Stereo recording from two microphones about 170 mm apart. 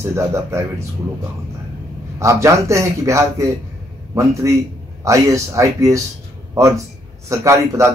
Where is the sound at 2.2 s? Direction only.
20° right (ahead or behind).